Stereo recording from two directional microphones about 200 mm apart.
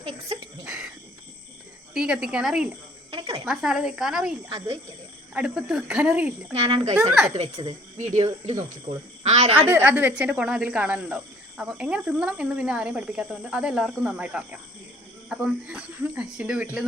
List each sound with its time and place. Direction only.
0.0 s a sound: 25° right (ahead or behind)
0.6 s a sound: 5° right (ahead or behind)
1.9 s speech: 5° right (ahead or behind)
3.1 s a sound: 25° right (ahead or behind)
3.4 s speech: centre (ahead or behind)
4.4 s speech: 25° right (ahead or behind)
5.3 s speech: 5° right (ahead or behind)
6.5 s speech: 30° right (ahead or behind)
7.1 s speech: 5° right (ahead or behind)
7.5 s speech: 20° right (ahead or behind)
7.9 s speech: 35° right (ahead or behind)
8.2 s speech: 20° right (ahead or behind)
9.2 s speech: 35° right (ahead or behind)
9.6 s speech: 10° right (ahead or behind)